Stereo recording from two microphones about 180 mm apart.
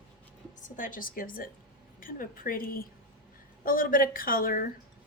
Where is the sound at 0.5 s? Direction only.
50° left (ahead or behind).